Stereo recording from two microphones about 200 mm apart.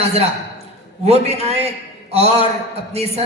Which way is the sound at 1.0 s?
30° right (ahead or behind).